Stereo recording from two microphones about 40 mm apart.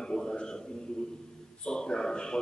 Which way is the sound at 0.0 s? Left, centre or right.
Centre.